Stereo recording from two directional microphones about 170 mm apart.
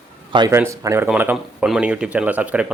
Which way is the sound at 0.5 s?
15° right (ahead or behind).